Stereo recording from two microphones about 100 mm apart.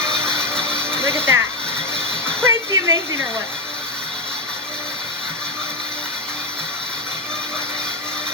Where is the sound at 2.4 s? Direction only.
25° right (ahead or behind).